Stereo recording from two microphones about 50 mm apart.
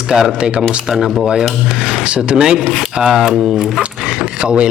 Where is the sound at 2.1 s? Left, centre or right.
Centre.